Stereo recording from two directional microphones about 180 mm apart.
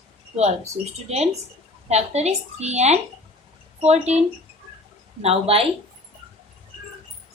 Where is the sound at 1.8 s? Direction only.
35° right (ahead or behind).